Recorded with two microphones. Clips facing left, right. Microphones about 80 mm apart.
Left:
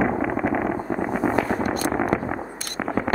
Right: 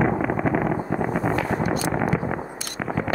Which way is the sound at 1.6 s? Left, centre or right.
Left.